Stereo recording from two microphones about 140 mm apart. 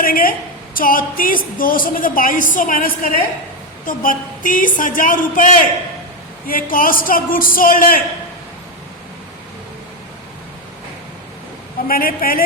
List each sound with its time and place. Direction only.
0.0 s a woman's voice: 90° left
3.8 s a woman's voice: 75° left (ahead or behind)
6.5 s a woman's voice: 85° left
11.9 s a woman's voice: 90° left